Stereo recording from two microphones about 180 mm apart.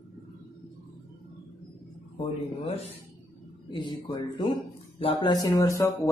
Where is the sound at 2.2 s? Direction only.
35° left (ahead or behind).